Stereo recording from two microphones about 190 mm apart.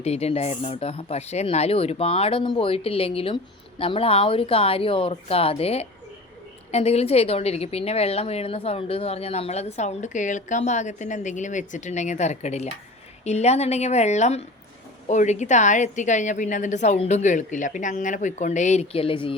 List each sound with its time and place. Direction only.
0.0 s a woman's voice: 35° left (ahead or behind)